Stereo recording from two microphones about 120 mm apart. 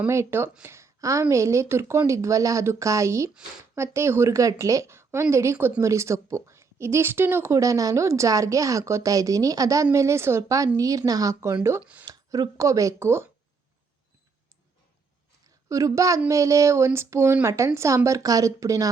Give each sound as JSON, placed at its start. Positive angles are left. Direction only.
{"t": 0.1, "sound": "a woman's voice", "side_deg": -20}
{"t": 15.7, "sound": "a woman's voice", "side_deg": -25}